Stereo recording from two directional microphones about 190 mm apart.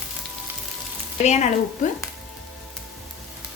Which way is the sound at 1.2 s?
35° left (ahead or behind).